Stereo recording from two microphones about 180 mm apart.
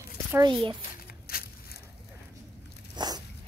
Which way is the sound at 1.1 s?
55° left (ahead or behind).